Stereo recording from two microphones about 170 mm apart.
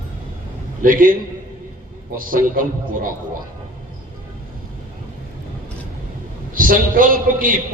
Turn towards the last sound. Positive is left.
turn(degrees=-55)  # may be behind; listen again after turning